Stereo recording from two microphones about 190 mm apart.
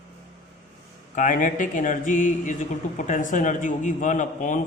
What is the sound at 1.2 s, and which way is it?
A man's voice, 45° left (ahead or behind).